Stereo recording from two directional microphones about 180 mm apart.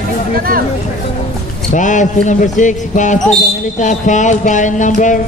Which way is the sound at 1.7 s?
45° left (ahead or behind).